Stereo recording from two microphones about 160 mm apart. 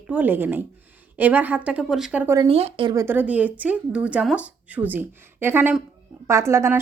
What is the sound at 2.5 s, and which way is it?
Speech, 40° right (ahead or behind).